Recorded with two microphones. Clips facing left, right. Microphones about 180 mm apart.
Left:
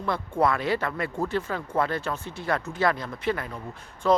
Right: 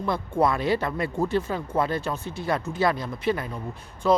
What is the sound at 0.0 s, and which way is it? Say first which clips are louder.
Speech: right 1 dB; 15° right (ahead or behind).